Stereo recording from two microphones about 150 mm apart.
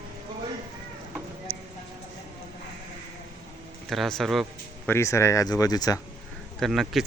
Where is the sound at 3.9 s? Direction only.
Centre (ahead or behind).